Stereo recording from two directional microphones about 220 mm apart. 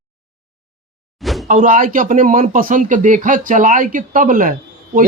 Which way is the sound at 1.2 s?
Centre (ahead or behind).